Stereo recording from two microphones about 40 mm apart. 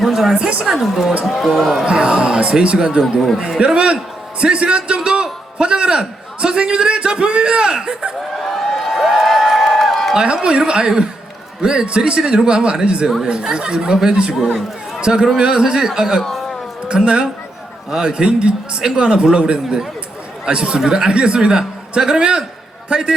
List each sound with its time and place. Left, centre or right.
0.0 s a sound: centre
0.3 s speech: right
0.6 s a woman's voice: centre
1.9 s speech: right
5.2 s a sound: right
6.7 s speech: right
8.4 s a sound: centre
10.2 s a woman's voice: centre
16.9 s speech: right